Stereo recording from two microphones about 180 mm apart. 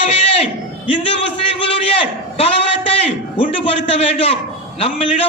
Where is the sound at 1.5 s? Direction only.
30° left (ahead or behind).